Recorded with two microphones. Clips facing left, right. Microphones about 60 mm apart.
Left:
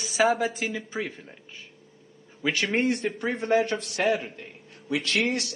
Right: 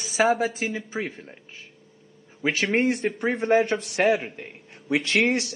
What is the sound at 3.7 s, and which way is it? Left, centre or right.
A man's voice, centre.